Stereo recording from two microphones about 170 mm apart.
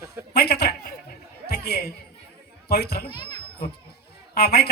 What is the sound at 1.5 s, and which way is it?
Chatter, 70° left (ahead or behind).